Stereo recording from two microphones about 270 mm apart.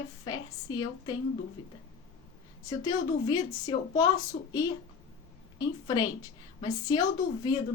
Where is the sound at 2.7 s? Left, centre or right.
Centre.